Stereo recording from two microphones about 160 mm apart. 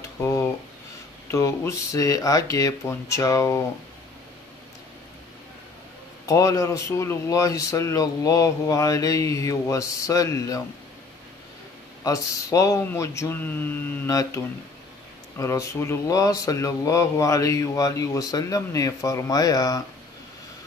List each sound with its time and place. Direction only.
0.2 s a sound: 20° left (ahead or behind)
1.3 s speech: 20° left (ahead or behind)
6.2 s speech: 20° left (ahead or behind)
12.0 s speech: 20° left (ahead or behind)